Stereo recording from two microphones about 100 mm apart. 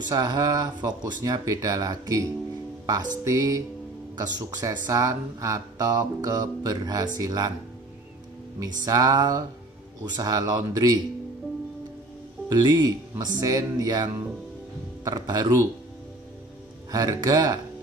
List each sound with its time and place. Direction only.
0.1 s speech: 40° right (ahead or behind)
8.5 s speech: 40° right (ahead or behind)
12.4 s speech: 40° right (ahead or behind)
16.9 s speech: 35° right (ahead or behind)